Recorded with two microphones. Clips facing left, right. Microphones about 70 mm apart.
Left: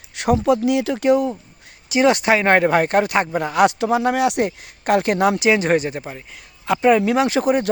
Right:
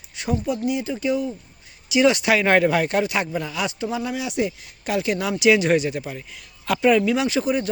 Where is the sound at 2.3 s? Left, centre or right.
Left.